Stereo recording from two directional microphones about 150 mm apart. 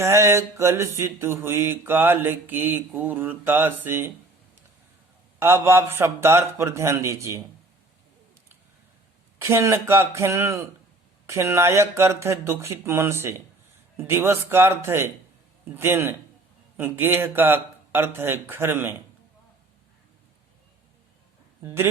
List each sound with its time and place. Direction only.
0.0 s mantra: 20° right (ahead or behind)
5.4 s mantra: 15° right (ahead or behind)
9.4 s mantra: 20° right (ahead or behind)
21.6 s speech: 15° right (ahead or behind)